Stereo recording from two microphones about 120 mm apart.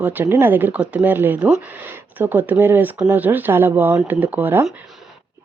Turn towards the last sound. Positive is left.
turn(degrees=-15)  # may be behind; listen again after turning